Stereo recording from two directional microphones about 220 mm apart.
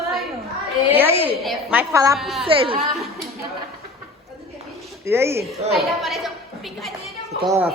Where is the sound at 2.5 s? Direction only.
25° right (ahead or behind).